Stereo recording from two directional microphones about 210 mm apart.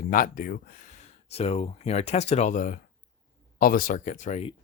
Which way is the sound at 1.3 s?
30° left (ahead or behind).